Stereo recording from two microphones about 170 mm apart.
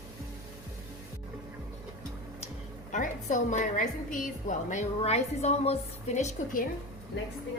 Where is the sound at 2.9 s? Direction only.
50° left (ahead or behind).